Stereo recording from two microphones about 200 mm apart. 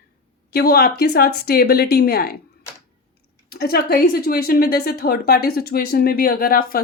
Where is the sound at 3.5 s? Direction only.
50° left (ahead or behind).